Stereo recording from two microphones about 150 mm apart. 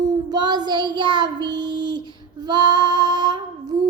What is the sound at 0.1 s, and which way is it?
Child singing, 25° right (ahead or behind).